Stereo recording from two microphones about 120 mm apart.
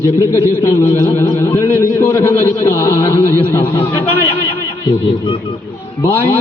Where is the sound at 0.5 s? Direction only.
20° left (ahead or behind).